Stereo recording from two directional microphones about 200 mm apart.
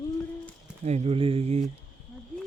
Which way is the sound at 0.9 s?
30° right (ahead or behind).